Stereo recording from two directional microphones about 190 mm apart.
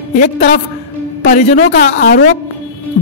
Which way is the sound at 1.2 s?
40° left (ahead or behind).